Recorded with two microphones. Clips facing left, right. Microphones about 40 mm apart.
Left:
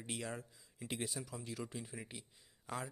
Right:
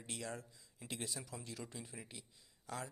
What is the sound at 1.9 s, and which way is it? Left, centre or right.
Speech, left.